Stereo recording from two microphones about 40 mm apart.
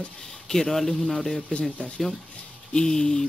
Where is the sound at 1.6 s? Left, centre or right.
Left.